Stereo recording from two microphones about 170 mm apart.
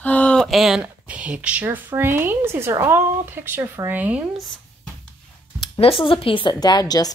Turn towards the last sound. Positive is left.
turn(degrees=20)  # may be behind; listen again after turning